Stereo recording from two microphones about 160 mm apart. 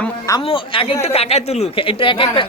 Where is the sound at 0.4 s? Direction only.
35° left (ahead or behind).